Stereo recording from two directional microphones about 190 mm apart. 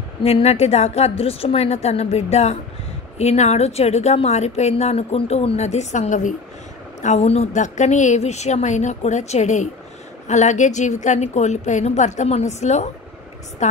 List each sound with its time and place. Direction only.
0.2 s a woman's voice: 35° left (ahead or behind)